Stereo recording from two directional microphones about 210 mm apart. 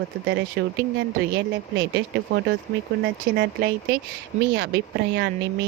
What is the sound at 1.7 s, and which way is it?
A woman's voice, 55° right (ahead or behind).